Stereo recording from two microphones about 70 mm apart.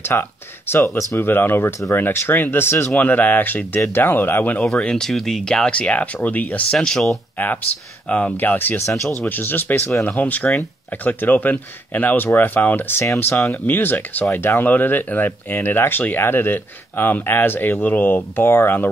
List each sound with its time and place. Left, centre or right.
0.0 s speech: left
2.9 s speech: left
4.7 s speech: centre
6.7 s speech: centre
7.4 s speech: left